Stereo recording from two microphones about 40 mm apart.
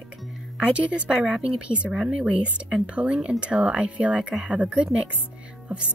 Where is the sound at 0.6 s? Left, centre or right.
Right.